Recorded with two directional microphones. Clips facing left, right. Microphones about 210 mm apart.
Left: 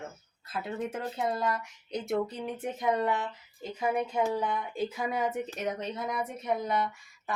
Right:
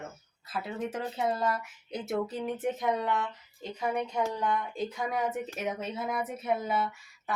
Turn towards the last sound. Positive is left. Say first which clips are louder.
# even
turn(degrees=-5)  # may be behind; listen again after turning